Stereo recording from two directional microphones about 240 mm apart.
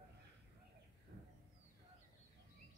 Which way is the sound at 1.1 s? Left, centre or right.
Right.